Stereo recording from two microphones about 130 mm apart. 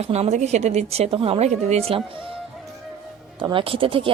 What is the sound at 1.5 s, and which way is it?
Speech, 60° right (ahead or behind).